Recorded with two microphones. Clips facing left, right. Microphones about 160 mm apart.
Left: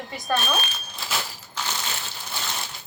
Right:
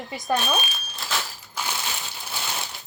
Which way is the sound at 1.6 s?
10° right (ahead or behind).